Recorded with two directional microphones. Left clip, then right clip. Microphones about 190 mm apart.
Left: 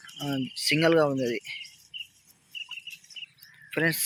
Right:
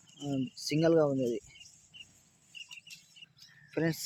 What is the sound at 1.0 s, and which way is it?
Speech, 20° left (ahead or behind).